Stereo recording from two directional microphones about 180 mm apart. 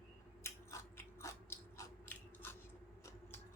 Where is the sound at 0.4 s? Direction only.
15° left (ahead or behind).